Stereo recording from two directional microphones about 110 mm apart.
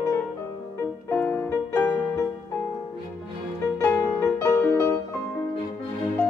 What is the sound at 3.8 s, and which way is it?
Music, 15° left (ahead or behind).